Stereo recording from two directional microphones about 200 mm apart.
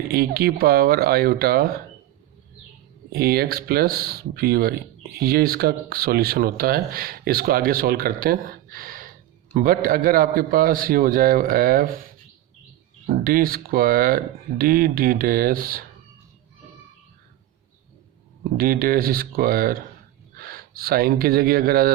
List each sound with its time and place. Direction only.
0.1 s speech: 50° right (ahead or behind)
3.1 s speech: 50° right (ahead or behind)
13.1 s speech: 45° right (ahead or behind)
18.5 s speech: 45° right (ahead or behind)